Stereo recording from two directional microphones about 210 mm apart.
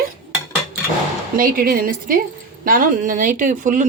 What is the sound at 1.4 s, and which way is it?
A woman's voice, 40° right (ahead or behind).